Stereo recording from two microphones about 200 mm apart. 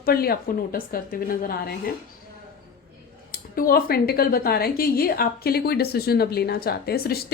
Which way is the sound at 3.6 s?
50° left (ahead or behind).